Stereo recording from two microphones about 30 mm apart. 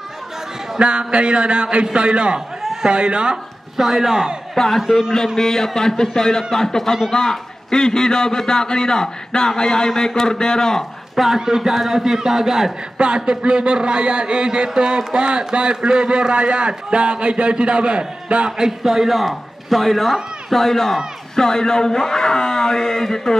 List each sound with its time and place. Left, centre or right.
0.7 s a man's voice: right
2.6 s a sound: centre
2.9 s a man's voice: right
3.7 s speech: centre
5.1 s a man's voice: centre
11.3 s speech: centre
12.9 s a man's voice: right
18.6 s speech: centre
19.1 s a man's voice: centre
20.6 s a man's voice: centre